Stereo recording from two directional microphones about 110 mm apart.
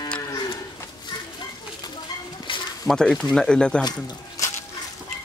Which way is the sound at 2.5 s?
50° left (ahead or behind).